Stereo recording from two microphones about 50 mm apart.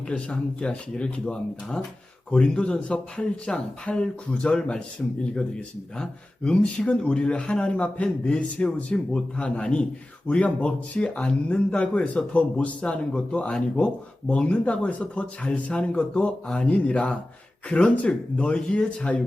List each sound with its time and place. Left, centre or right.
0.1 s speech: left